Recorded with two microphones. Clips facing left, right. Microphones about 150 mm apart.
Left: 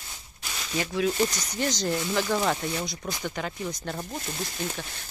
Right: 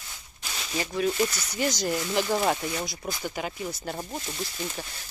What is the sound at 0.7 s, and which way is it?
Speech, centre (ahead or behind).